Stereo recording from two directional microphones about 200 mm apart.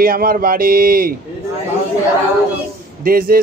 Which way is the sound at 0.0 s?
45° right (ahead or behind).